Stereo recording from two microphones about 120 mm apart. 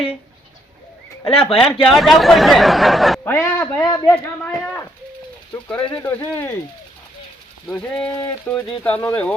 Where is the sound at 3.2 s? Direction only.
20° left (ahead or behind).